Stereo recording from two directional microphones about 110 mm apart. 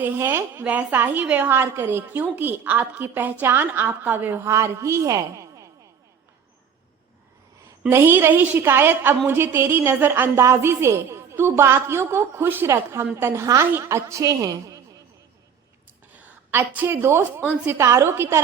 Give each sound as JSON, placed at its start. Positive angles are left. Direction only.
{"t": 0.0, "sound": "a woman's voice", "side_deg": -20}
{"t": 7.9, "sound": "a woman's voice", "side_deg": -20}
{"t": 16.5, "sound": "a woman's voice", "side_deg": -20}